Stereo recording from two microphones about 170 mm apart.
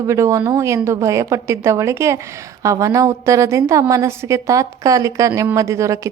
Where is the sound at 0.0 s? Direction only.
20° right (ahead or behind).